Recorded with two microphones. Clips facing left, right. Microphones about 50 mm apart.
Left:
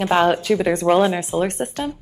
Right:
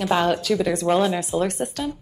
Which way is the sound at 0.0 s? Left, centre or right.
Left.